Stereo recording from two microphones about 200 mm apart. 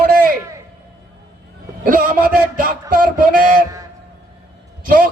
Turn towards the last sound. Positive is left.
turn(degrees=-45)  # may be behind; listen again after turning